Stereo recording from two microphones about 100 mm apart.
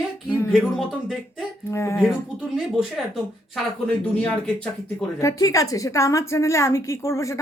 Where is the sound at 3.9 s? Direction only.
10° left (ahead or behind).